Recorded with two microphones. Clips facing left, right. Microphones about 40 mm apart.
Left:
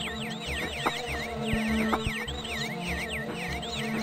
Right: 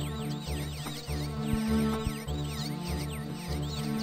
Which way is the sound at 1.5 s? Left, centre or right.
Left.